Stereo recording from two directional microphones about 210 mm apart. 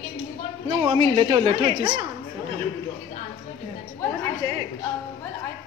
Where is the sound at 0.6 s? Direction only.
25° right (ahead or behind).